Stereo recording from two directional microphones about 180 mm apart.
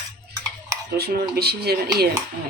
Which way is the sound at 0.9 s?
60° right (ahead or behind).